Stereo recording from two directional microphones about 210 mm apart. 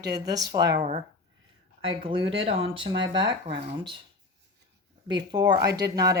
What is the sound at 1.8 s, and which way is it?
Speech, 25° right (ahead or behind).